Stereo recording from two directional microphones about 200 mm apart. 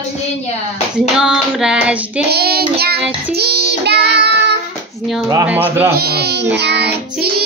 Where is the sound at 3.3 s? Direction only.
55° right (ahead or behind).